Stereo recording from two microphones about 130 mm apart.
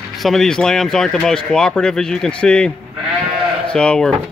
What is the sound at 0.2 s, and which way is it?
Speech, 5° left (ahead or behind).